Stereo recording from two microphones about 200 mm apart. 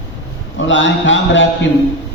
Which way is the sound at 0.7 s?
70° left (ahead or behind).